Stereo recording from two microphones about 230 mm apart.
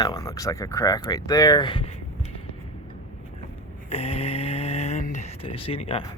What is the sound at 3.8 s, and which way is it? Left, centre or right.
Snoring, left.